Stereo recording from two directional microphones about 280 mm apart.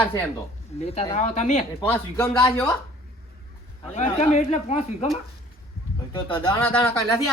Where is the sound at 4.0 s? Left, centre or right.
Left.